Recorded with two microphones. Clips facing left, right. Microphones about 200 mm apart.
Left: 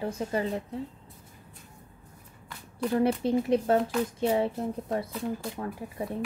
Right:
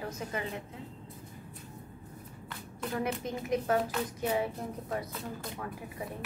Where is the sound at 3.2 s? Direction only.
30° left (ahead or behind).